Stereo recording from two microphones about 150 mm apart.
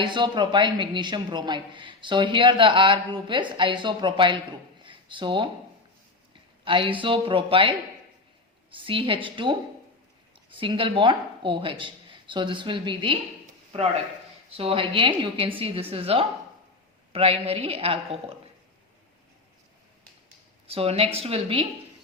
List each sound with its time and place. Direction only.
0.0 s speech: 30° right (ahead or behind)
4.8 s a sound: 35° right (ahead or behind)
6.7 s speech: 35° right (ahead or behind)
20.7 s speech: 40° right (ahead or behind)